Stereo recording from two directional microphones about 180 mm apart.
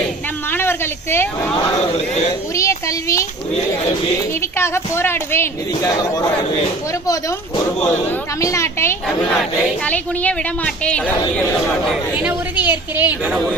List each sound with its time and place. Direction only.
0.5 s a sound: 10° left (ahead or behind)
2.6 s a woman's voice: 15° left (ahead or behind)
4.4 s a woman's voice: 15° left (ahead or behind)
7.8 s a woman's voice: 15° left (ahead or behind)
12.2 s a woman's voice: 10° right (ahead or behind)